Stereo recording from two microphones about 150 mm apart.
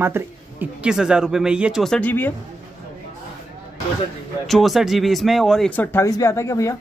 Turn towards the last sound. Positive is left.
turn(degrees=20)  # may be behind; listen again after turning